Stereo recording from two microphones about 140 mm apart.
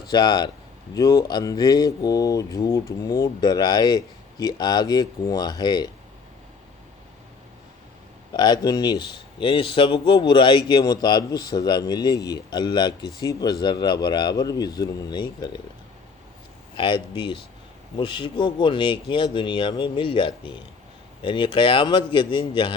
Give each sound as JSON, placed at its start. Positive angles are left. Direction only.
{"t": 0.0, "sound": "speech", "side_deg": 30}
{"t": 8.3, "sound": "speech", "side_deg": 30}
{"t": 16.7, "sound": "speech", "side_deg": 35}